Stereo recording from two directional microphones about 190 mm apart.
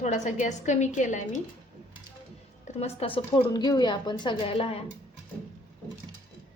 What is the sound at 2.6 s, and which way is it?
A woman's voice, 35° left (ahead or behind).